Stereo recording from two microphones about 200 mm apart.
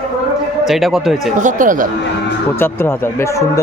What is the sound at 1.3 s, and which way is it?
Speech, 40° right (ahead or behind).